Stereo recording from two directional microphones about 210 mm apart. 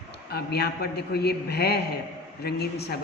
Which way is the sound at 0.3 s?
50° left (ahead or behind).